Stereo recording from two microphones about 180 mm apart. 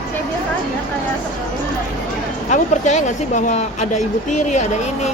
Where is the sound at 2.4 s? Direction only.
40° left (ahead or behind).